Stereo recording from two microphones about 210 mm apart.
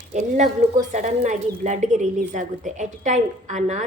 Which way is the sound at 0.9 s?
35° right (ahead or behind).